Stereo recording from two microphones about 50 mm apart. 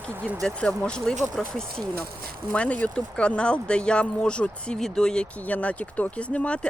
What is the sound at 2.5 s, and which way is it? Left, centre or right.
Speech, left.